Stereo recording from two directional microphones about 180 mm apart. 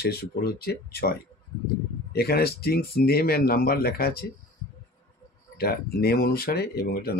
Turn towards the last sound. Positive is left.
turn(degrees=60)  # may be behind; listen again after turning